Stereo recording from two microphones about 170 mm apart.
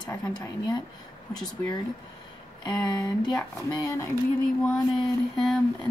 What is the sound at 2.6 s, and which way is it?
A woman's voice, 25° left (ahead or behind).